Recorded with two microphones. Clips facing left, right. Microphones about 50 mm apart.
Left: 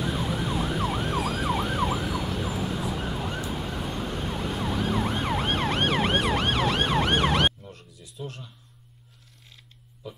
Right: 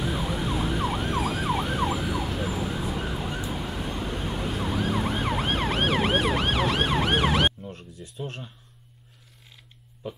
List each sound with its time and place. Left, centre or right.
0.0 s emergency vehicle: centre
7.6 s a sound: right
10.0 s speech: right